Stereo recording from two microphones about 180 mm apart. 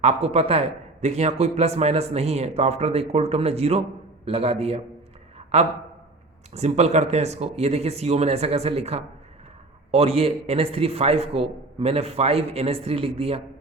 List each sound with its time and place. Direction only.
0.0 s speech: 35° right (ahead or behind)
6.5 s speech: 35° right (ahead or behind)